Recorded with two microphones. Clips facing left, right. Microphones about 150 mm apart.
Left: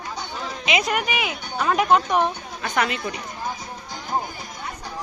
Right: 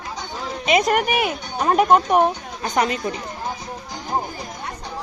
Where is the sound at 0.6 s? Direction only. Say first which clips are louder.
Right 6 dB; 45° right (ahead or behind).